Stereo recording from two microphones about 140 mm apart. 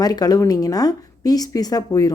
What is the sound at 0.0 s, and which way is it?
Speech, 30° left (ahead or behind).